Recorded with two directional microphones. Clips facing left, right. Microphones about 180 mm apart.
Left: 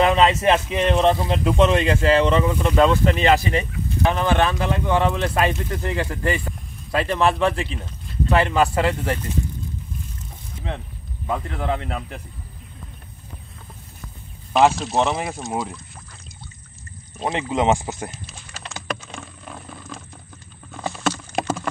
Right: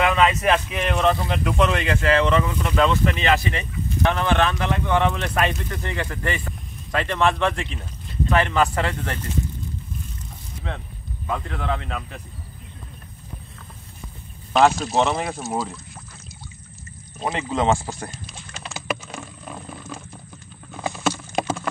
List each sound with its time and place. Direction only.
0.0 s speech: 30° left (ahead or behind)
4.1 s speech: 15° left (ahead or behind)
11.2 s speech: 20° left (ahead or behind)
14.5 s speech: centre (ahead or behind)
17.3 s speech: 15° left (ahead or behind)
18.6 s typing: 5° right (ahead or behind)
20.7 s clip-clop: centre (ahead or behind)